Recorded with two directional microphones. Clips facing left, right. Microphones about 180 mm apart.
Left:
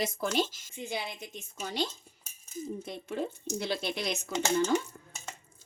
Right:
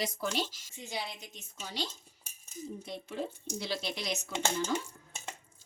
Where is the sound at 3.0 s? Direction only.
55° left (ahead or behind).